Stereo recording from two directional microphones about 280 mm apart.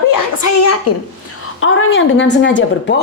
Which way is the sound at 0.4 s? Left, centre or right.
Left.